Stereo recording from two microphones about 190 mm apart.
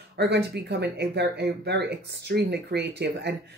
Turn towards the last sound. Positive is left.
turn(degrees=-60)  # may be behind; listen again after turning